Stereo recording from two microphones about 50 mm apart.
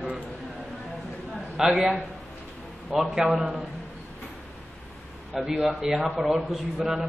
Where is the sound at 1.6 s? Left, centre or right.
Centre.